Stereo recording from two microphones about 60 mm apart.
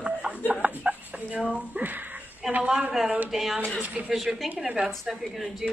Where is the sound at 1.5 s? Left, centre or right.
Right.